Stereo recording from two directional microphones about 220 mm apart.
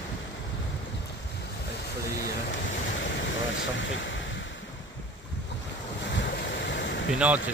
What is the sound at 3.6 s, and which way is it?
Speech, 55° left (ahead or behind).